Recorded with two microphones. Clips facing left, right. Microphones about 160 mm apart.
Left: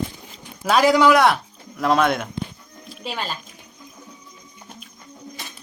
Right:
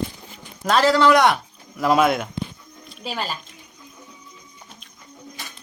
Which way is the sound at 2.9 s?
Centre (ahead or behind).